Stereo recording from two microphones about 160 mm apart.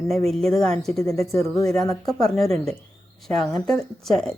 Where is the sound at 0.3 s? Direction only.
Centre (ahead or behind).